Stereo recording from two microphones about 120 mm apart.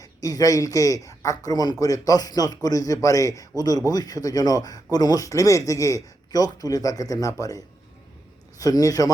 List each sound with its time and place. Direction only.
0.0 s a man's voice: 30° left (ahead or behind)